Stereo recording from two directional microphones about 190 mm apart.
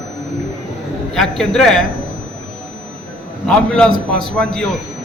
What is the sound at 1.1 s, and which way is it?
Speech, centre (ahead or behind).